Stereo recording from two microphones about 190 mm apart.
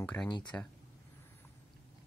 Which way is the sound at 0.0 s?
5° left (ahead or behind).